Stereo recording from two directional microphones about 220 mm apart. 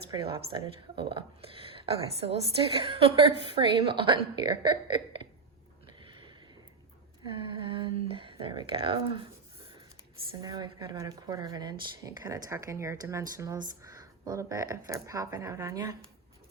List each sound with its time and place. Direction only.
0.1 s a woman's voice: 20° right (ahead or behind)
7.3 s a sound: 25° right (ahead or behind)
10.4 s speech: 20° right (ahead or behind)